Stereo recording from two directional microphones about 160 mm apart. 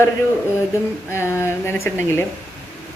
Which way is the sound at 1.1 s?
15° left (ahead or behind).